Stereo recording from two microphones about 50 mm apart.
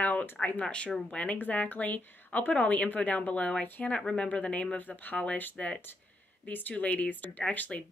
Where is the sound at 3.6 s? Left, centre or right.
Left.